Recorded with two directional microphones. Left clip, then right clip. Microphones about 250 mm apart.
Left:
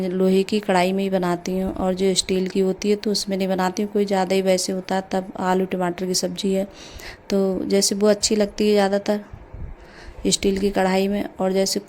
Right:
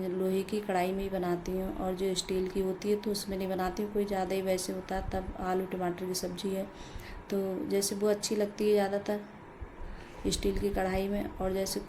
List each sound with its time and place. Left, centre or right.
0.0 s speech: left
10.2 s speech: left